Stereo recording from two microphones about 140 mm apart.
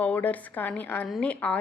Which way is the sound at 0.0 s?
10° left (ahead or behind).